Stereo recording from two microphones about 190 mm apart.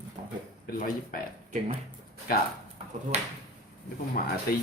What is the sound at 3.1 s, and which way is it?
Speech, 35° right (ahead or behind).